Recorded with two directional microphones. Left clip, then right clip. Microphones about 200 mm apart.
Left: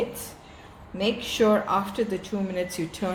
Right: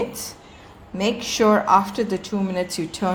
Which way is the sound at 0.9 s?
40° right (ahead or behind).